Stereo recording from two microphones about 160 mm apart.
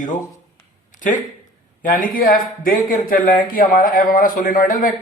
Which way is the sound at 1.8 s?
55° left (ahead or behind).